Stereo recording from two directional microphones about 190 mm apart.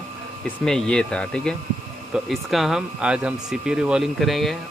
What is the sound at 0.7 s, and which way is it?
Speech, 5° left (ahead or behind).